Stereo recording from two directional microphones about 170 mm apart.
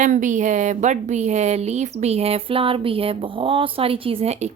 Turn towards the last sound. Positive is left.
turn(degrees=-40)  # may be behind; listen again after turning